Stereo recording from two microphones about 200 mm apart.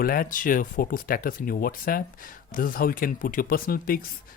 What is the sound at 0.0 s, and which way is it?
Speech, 45° left (ahead or behind).